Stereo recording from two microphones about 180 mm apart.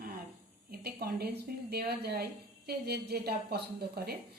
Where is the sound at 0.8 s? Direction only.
60° right (ahead or behind).